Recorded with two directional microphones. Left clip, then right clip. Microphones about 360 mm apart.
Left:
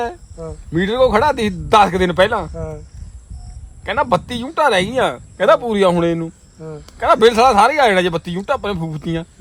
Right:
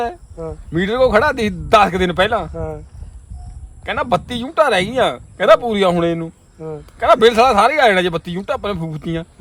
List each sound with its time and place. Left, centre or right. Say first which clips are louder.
0.7 s speech: even; centre
2.6 s speech: right 2 dB; centre
3.8 s speech: left 1 dB; centre